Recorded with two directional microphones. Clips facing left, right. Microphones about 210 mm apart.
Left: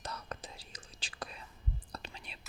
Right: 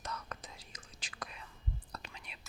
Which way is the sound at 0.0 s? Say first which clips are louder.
Left 1 dB; 35° left (ahead or behind).